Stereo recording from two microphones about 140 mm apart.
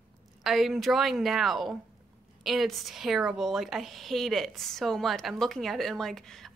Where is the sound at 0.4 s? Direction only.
Centre (ahead or behind).